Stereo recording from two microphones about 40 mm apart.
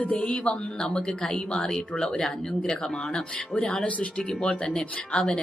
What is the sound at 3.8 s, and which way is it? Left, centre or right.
Speech, left.